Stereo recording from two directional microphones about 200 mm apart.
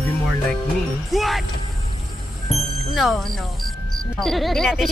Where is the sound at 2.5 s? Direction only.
Centre (ahead or behind).